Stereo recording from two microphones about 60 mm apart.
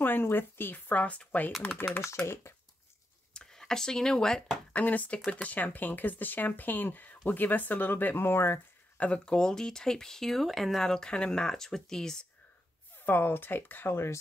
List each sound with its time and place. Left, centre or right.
0.0 s speech: left
2.2 s speech: left
3.3 s speech: centre
4.7 s speech: left
8.9 s speech: left
13.0 s speech: left